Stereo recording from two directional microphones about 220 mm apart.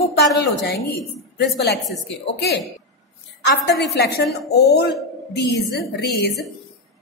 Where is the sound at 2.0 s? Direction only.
50° left (ahead or behind).